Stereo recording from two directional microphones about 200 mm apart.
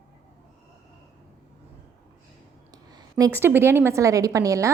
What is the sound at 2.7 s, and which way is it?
A woman's voice, 20° right (ahead or behind).